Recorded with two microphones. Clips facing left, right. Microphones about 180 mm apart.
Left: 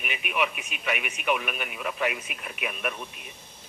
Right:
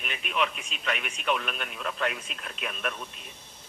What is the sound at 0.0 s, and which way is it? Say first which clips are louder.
Speech: left 1 dB; 10° left (ahead or behind).